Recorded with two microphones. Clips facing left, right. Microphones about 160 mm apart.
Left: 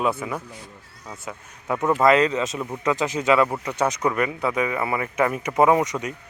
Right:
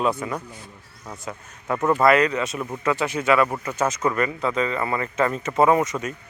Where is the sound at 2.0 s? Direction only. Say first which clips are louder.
Left 1 dB; 20° left (ahead or behind).